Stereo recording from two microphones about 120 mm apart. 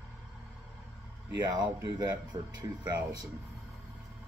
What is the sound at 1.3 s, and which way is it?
Speech, 35° right (ahead or behind).